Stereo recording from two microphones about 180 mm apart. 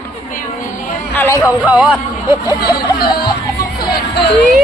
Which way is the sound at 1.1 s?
10° left (ahead or behind).